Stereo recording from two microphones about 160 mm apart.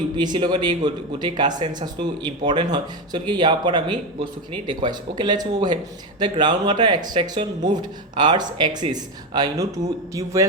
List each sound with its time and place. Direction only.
0.2 s speech: 25° right (ahead or behind)